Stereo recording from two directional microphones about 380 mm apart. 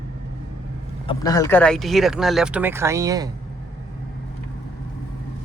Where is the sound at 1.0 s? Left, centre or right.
Centre.